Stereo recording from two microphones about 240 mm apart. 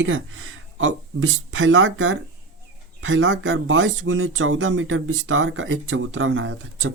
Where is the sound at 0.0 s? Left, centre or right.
Right.